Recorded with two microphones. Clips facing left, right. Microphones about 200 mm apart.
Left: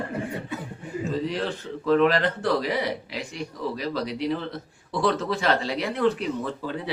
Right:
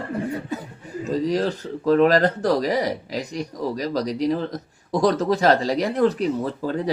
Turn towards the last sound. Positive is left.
turn(degrees=-40)  # may be behind; listen again after turning